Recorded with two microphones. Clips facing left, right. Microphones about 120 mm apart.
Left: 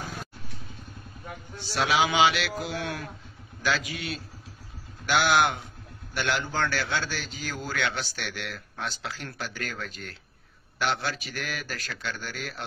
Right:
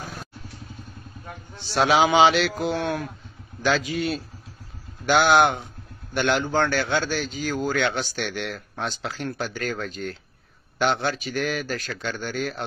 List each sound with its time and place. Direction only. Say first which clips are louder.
1.6 s a man's voice: right 6 dB; 30° right (ahead or behind)
5.0 s a man's voice: right 5 dB; 30° right (ahead or behind)